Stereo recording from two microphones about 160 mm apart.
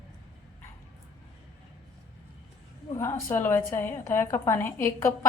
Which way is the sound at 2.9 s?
15° left (ahead or behind).